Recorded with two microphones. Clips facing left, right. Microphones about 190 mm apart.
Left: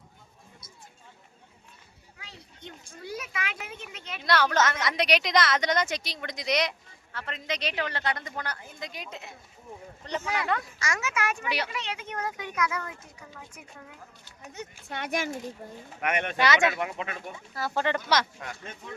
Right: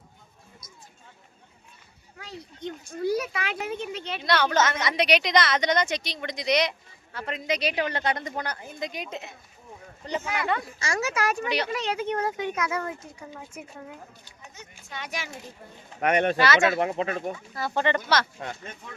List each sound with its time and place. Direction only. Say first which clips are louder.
2.1 s a sound: right 10 dB; 40° right (ahead or behind)
3.0 s a woman's voice: right 10 dB; 35° right (ahead or behind)
4.2 s a woman's voice: right 1 dB; centre (ahead or behind)
7.1 s a woman's voice: right 5 dB; 15° right (ahead or behind)
10.0 s speech: right 3 dB; 10° right (ahead or behind)
10.8 s a woman's voice: right 3 dB; 30° right (ahead or behind)
11.4 s speech: right 4 dB; 10° left (ahead or behind)
11.7 s a woman's voice: right 8 dB; 40° right (ahead or behind)
14.5 s speech: left 4 dB; 60° left (ahead or behind)
16.0 s a woman's voice: right 7 dB; 35° right (ahead or behind)
16.4 s speech: right 2 dB; 15° left (ahead or behind)
16.7 s a woman's voice: right 7 dB; 35° right (ahead or behind)
17.5 s a woman's voice: right 2 dB; 5° left (ahead or behind)
18.3 s a woman's voice: right 4 dB; 25° right (ahead or behind)